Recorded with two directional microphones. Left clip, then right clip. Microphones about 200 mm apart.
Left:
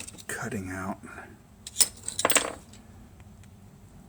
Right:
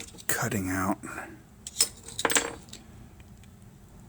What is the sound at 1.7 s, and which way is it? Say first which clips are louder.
Keys jangling: left 1 dB; 25° left (ahead or behind).